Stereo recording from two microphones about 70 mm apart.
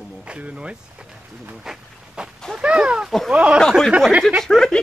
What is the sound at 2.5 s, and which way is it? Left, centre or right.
Speech, centre.